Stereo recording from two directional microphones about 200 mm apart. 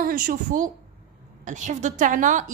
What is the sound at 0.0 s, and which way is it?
A woman's voice, 45° right (ahead or behind).